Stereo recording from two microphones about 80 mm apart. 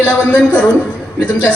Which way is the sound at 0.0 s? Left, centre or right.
Left.